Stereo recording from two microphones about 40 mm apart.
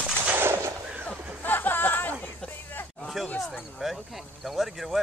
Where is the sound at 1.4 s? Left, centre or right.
Left.